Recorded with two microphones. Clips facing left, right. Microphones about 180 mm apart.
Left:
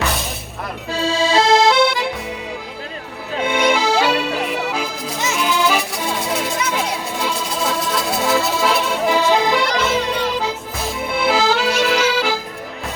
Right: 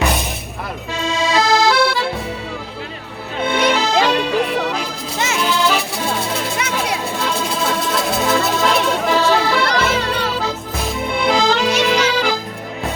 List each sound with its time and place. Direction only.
0.9 s accordion: 30° left (ahead or behind)
3.4 s music: 10° left (ahead or behind)
5.1 s music: 70° right (ahead or behind)
5.4 s music: 10° left (ahead or behind)
6.6 s a sound: 70° right (ahead or behind)
7.2 s music: 5° left (ahead or behind)
9.8 s music: 70° right (ahead or behind)
11.0 s accordion: 5° left (ahead or behind)